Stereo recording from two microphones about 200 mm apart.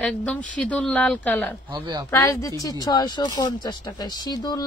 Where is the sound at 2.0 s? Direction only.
15° left (ahead or behind).